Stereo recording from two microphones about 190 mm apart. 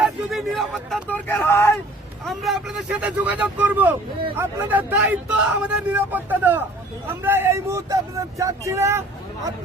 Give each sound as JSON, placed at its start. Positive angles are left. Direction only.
{"t": 0.0, "sound": "speech", "side_deg": 0}
{"t": 2.2, "sound": "speech", "side_deg": 0}